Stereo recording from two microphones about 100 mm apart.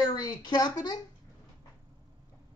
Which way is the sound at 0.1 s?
45° left (ahead or behind).